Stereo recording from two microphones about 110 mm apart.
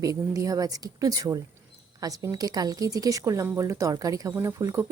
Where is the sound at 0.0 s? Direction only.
30° right (ahead or behind).